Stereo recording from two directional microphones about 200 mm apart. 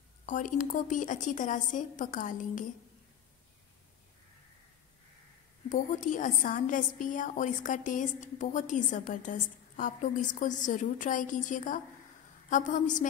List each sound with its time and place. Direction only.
0.3 s a woman's voice: 40° left (ahead or behind)
5.7 s a woman's voice: 40° left (ahead or behind)